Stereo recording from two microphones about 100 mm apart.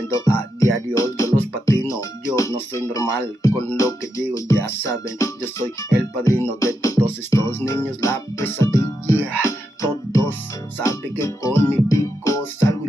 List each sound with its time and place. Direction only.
0.3 s music: 30° left (ahead or behind)
8.0 s speech: 30° left (ahead or behind)
9.5 s music: 30° left (ahead or behind)